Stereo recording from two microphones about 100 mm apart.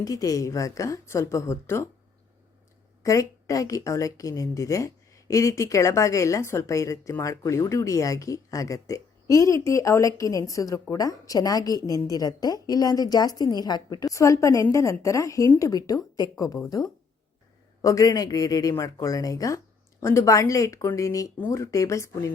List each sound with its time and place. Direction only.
0.0 s a woman's voice: 35° left (ahead or behind)
3.0 s a woman's voice: 30° left (ahead or behind)
14.1 s a woman's voice: 30° left (ahead or behind)
17.8 s a woman's voice: 35° left (ahead or behind)